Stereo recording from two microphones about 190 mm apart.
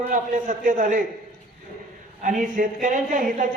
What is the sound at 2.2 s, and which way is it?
A man's voice, 45° right (ahead or behind).